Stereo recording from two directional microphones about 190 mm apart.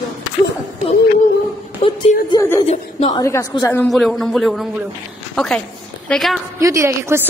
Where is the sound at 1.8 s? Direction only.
30° left (ahead or behind).